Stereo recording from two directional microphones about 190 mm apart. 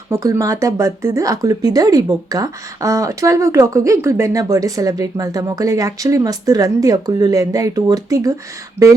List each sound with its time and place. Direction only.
0.1 s speech: 15° right (ahead or behind)